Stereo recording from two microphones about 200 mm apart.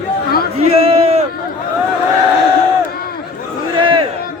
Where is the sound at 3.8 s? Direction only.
25° right (ahead or behind).